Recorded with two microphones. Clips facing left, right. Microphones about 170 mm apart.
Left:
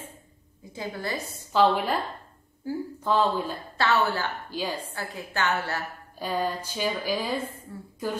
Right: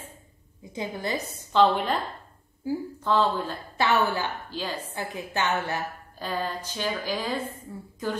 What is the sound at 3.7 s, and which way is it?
Speech, 15° right (ahead or behind).